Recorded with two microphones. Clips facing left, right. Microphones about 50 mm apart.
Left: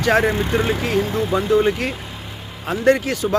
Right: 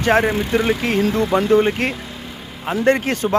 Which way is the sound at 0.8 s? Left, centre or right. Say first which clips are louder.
Right 2 dB; right.